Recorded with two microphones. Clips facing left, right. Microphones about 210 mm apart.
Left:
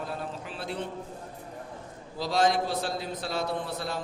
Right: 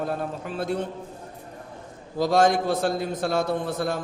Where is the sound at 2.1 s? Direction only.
50° right (ahead or behind).